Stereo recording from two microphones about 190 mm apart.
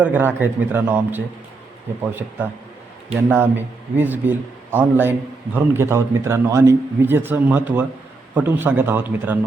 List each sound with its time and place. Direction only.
0.0 s a man's voice: 10° right (ahead or behind)